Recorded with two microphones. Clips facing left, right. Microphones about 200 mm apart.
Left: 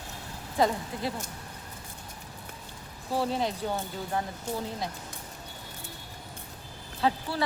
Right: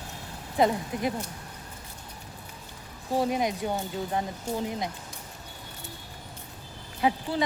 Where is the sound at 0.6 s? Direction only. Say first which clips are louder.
Right 2 dB; 20° right (ahead or behind).